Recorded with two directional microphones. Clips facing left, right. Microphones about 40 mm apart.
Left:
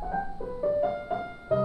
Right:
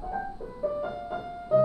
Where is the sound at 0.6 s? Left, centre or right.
Left.